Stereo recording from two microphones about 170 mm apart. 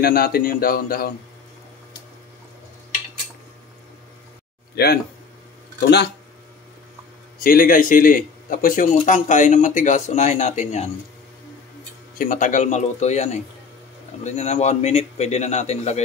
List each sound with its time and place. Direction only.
0.0 s speech: 60° left (ahead or behind)
4.7 s speech: 65° left (ahead or behind)
7.3 s a man's voice: 60° left (ahead or behind); by 10.9 s 40° left (ahead or behind)
12.2 s a man's voice: 50° left (ahead or behind)